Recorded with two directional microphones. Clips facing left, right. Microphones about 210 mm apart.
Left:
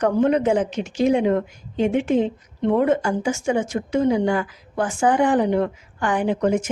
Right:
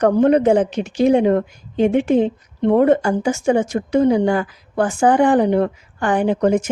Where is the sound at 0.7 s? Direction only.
65° right (ahead or behind).